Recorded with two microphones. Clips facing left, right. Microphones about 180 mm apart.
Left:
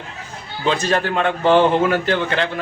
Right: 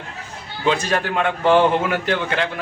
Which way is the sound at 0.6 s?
10° right (ahead or behind).